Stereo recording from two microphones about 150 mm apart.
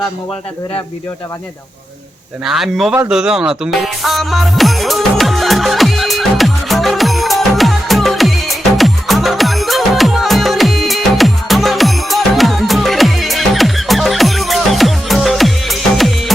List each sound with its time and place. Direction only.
2.4 s a man's voice: centre (ahead or behind)
3.1 s music: 5° right (ahead or behind)